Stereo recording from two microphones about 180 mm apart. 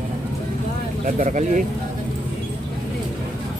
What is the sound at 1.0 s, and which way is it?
Speech, 45° right (ahead or behind).